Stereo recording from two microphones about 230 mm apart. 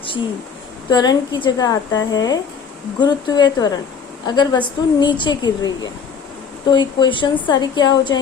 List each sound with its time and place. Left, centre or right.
0.9 s a woman's voice: centre